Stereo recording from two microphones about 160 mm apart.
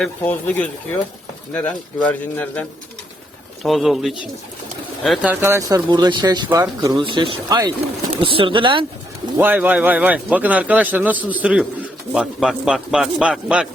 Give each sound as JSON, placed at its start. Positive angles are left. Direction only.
{"t": 0.0, "sound": "a man's voice", "side_deg": 10}
{"t": 5.3, "sound": "speech", "side_deg": -15}
{"t": 6.5, "sound": "speech", "side_deg": -20}
{"t": 9.4, "sound": "a man's voice", "side_deg": -10}